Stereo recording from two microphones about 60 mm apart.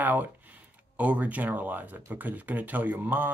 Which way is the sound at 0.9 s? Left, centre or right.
Right.